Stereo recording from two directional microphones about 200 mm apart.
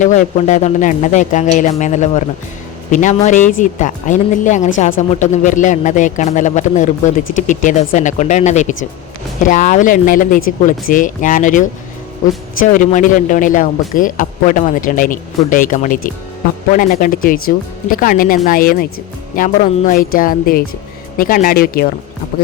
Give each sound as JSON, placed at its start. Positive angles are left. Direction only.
{"t": 0.0, "sound": "a man's voice", "side_deg": 40}